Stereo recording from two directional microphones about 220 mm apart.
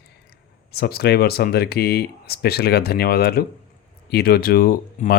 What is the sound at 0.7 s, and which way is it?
Speech, 45° left (ahead or behind).